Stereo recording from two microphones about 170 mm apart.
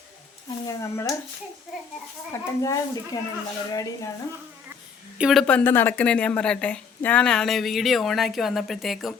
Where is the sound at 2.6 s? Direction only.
20° left (ahead or behind).